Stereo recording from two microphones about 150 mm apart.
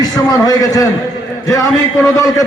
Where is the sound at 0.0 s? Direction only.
25° left (ahead or behind).